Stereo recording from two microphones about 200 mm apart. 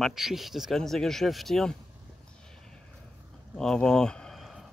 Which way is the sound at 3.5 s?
5° left (ahead or behind).